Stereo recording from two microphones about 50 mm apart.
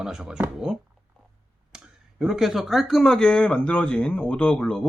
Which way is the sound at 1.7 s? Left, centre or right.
Centre.